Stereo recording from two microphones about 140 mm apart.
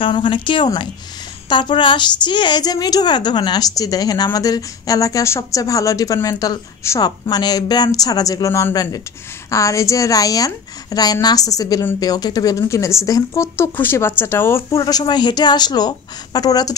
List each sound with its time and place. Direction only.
0.0 s a woman's voice: 35° left (ahead or behind); by 14.8 s 15° left (ahead or behind)
14.8 s a woman's voice: 30° left (ahead or behind)